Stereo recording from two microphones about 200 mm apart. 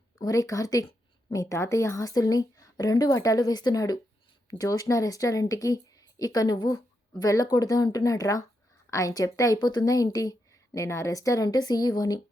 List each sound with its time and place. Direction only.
0.2 s a woman's voice: 15° left (ahead or behind)